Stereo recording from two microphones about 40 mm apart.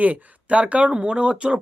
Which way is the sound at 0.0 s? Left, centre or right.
Right.